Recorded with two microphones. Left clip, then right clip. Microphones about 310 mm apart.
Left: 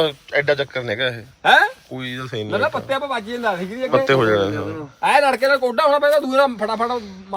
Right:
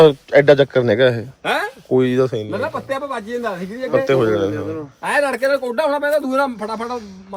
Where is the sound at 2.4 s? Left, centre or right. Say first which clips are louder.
Left 2 dB; centre.